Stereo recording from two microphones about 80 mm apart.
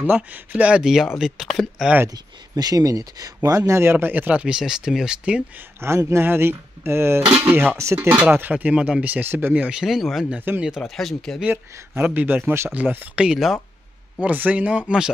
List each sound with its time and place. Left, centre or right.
0.0 s speech: right; by 1.9 s centre
2.5 s speech: right; by 5.4 s centre
5.8 s speech: right
7.4 s speech: centre
7.7 s speech: right
8.2 s speech: right
9.5 s speech: centre
10.3 s speech: right
10.8 s speech: centre
11.4 s speech: right; by 13.6 s centre
14.1 s speech: centre